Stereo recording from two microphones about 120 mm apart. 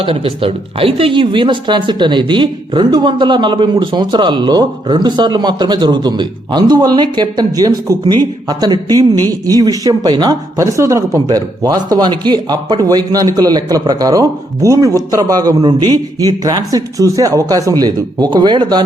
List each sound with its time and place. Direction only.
0.0 s speech: 50° right (ahead or behind)